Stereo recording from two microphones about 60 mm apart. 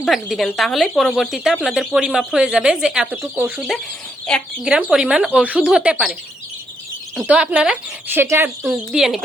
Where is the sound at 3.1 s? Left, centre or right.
Right.